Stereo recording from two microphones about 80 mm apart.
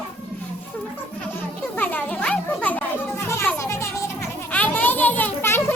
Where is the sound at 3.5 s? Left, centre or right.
Left.